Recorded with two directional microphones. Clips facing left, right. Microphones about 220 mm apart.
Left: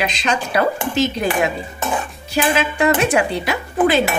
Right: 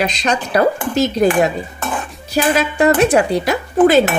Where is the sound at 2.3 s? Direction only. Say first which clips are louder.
Right 3 dB; 40° right (ahead or behind).